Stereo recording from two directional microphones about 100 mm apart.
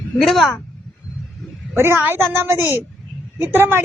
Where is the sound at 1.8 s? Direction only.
25° right (ahead or behind).